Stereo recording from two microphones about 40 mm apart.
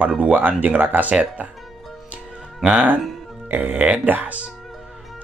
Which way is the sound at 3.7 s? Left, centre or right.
Right.